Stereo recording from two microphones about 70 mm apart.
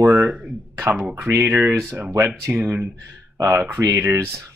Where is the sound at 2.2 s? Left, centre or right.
Right.